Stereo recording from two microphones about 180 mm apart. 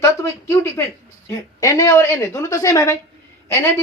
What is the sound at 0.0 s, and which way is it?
A woman's voice, 15° left (ahead or behind).